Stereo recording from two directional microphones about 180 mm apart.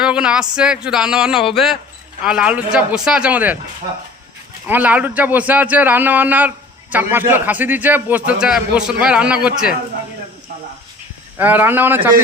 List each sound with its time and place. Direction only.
0.0 s speech: 5° right (ahead or behind)
4.6 s a man's voice: 10° right (ahead or behind)
11.3 s a man's voice: 10° right (ahead or behind)